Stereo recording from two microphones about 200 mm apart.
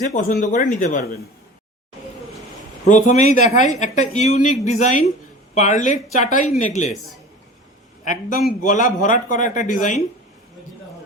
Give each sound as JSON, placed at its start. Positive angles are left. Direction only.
{"t": 0.0, "sound": "speech", "side_deg": 40}
{"t": 2.8, "sound": "speech", "side_deg": 40}
{"t": 8.0, "sound": "speech", "side_deg": 40}